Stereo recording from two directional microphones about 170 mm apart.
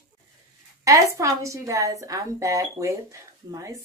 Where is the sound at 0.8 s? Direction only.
20° right (ahead or behind).